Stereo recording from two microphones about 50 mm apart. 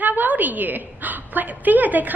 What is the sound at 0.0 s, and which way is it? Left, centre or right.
A woman's voice, right.